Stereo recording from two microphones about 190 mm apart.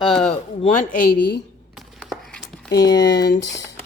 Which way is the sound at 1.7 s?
Centre (ahead or behind).